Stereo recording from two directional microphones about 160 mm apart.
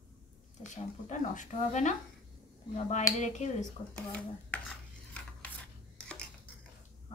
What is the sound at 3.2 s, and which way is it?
Speech, 50° left (ahead or behind).